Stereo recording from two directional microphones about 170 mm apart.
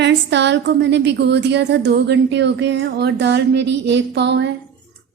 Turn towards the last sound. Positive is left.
turn(degrees=-90)